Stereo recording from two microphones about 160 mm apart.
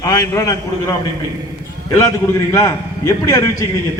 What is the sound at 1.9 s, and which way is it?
A man's voice, 20° left (ahead or behind).